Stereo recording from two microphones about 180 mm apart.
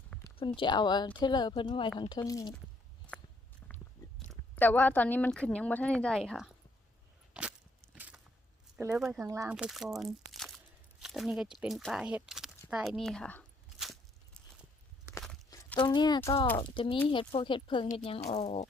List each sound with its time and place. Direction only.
0.3 s speech: 25° left (ahead or behind)
3.6 s biting: 10° left (ahead or behind)
4.3 s speech: 10° left (ahead or behind)
7.3 s a sound: 5° right (ahead or behind)
8.7 s speech: 5° right (ahead or behind)
9.2 s speech: 20° right (ahead or behind)
9.5 s speech: 5° right (ahead or behind)
13.7 s a sound: centre (ahead or behind)
15.4 s speech: 25° left (ahead or behind); by 18.7 s 40° left (ahead or behind)